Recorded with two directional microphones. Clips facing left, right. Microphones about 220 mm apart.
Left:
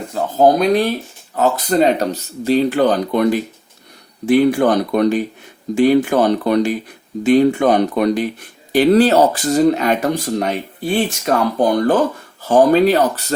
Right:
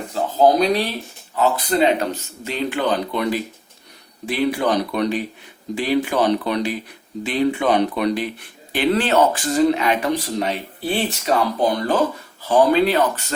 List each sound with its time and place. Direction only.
0.1 s speech: 50° left (ahead or behind)